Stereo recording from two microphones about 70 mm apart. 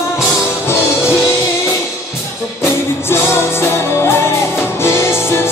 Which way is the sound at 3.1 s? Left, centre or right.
Left.